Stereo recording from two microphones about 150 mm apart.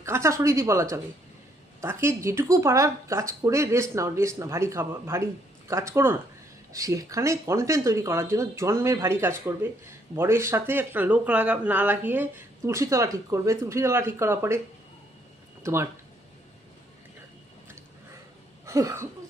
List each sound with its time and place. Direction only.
0.0 s speech: 20° right (ahead or behind)
15.6 s speech: 15° right (ahead or behind)
18.6 s a sound: 20° right (ahead or behind)